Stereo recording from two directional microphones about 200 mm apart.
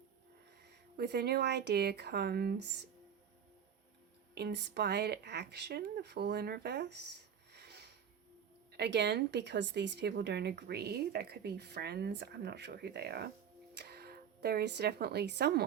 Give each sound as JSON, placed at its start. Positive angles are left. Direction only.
{"t": 0.9, "sound": "speech", "side_deg": -55}
{"t": 4.4, "sound": "speech", "side_deg": -55}
{"t": 7.5, "sound": "a sound", "side_deg": -55}
{"t": 8.7, "sound": "speech", "side_deg": -55}